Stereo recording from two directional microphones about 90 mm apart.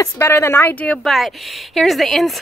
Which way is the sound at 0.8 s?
Centre (ahead or behind).